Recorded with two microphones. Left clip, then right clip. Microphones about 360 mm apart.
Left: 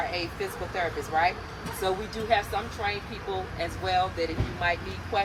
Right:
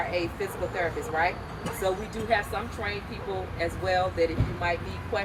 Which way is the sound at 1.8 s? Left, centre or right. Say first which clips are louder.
Even; centre.